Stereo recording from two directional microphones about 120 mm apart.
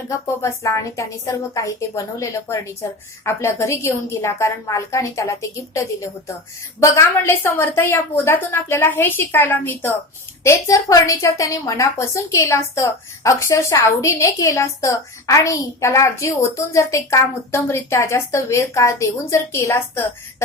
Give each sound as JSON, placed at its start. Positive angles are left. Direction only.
{"t": 0.4, "sound": "a woman's voice", "side_deg": 25}